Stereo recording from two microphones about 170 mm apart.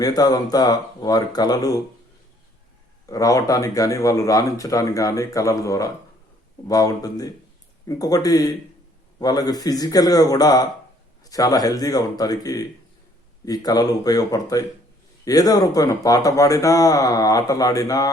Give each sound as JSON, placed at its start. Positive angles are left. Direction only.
{"t": 0.0, "sound": "a man's voice", "side_deg": 20}
{"t": 3.1, "sound": "a man's voice", "side_deg": 20}